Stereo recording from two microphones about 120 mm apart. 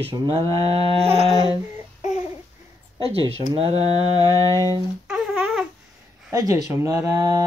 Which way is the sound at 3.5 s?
55° right (ahead or behind).